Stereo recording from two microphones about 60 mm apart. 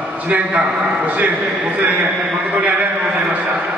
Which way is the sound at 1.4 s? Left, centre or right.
Centre.